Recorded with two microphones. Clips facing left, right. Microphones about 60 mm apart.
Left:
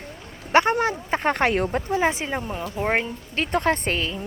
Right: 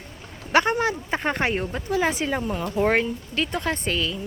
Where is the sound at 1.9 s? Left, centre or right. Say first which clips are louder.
Right 3 dB; left.